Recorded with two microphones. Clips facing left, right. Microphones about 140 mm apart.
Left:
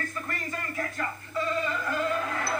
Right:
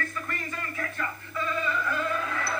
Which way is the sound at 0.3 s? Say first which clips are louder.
Left 1 dB; 35° left (ahead or behind).